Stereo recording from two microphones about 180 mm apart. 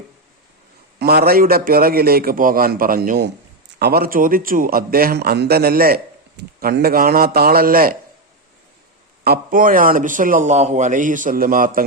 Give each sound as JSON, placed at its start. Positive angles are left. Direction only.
{"t": 0.9, "sound": "a man's voice", "side_deg": -60}
{"t": 9.2, "sound": "a man's voice", "side_deg": -55}